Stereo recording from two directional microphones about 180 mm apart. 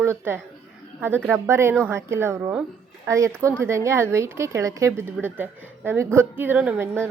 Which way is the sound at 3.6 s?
15° right (ahead or behind).